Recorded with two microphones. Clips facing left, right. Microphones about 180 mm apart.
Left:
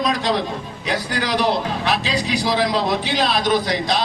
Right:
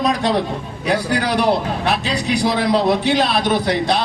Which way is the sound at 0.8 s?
55° right (ahead or behind).